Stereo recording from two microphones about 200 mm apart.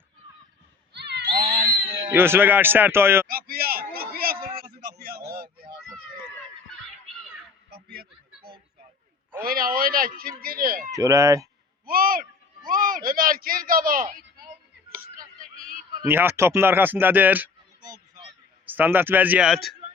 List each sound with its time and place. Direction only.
0.9 s a sound: 55° right (ahead or behind)
2.1 s speech: 10° right (ahead or behind)
3.2 s a sound: 50° right (ahead or behind)
7.7 s honk: 50° right (ahead or behind)
9.4 s speech: 45° right (ahead or behind)
10.9 s speech: 15° right (ahead or behind)
11.9 s a sound: 45° right (ahead or behind)
16.0 s speech: 10° right (ahead or behind)
18.8 s speech: 10° right (ahead or behind)